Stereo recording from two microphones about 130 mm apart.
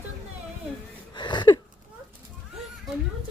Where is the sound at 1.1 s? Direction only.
35° left (ahead or behind).